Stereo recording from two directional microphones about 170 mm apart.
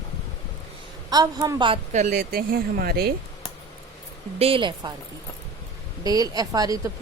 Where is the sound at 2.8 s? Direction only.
65° right (ahead or behind).